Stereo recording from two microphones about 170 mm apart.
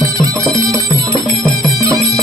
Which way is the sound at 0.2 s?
20° right (ahead or behind).